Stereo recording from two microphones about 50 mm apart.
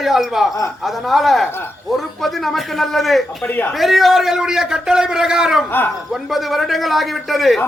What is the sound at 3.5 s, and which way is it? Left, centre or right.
Speech, left.